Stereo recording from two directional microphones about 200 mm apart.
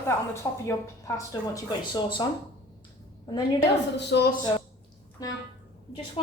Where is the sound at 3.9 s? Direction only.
55° left (ahead or behind).